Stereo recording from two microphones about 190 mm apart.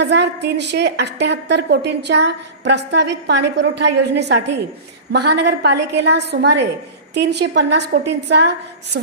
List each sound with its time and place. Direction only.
0.0 s a woman's voice: 65° right (ahead or behind)